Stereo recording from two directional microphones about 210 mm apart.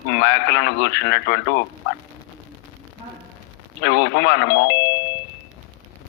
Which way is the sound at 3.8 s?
55° left (ahead or behind).